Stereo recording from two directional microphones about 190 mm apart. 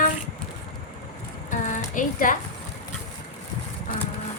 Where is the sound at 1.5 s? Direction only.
45° left (ahead or behind).